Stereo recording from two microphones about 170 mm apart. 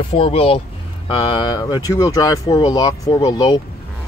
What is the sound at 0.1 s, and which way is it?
Speech, 35° left (ahead or behind).